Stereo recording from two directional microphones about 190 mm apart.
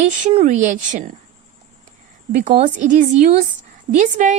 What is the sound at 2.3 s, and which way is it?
Speech, 35° right (ahead or behind).